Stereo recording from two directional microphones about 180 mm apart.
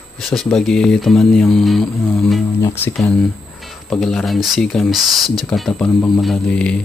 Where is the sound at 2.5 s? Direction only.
15° left (ahead or behind).